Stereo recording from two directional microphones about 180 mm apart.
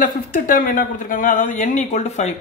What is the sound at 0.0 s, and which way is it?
Speech, 50° left (ahead or behind).